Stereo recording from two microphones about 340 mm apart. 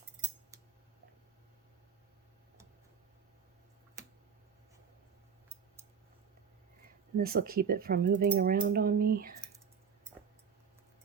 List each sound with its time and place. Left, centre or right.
7.2 s speech: right